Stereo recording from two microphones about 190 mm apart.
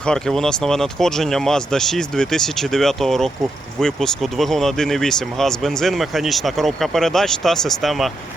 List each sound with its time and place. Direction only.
0.0 s speech: 5° left (ahead or behind)